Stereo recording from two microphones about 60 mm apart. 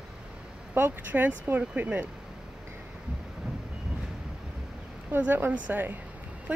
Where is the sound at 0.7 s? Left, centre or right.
Right.